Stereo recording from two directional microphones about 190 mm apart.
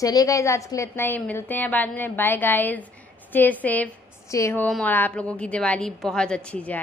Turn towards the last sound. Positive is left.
turn(degrees=5)  # may be behind; listen again after turning